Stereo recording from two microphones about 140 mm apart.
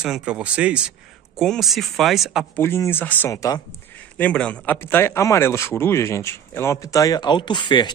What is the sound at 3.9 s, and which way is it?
A man's voice, 10° left (ahead or behind).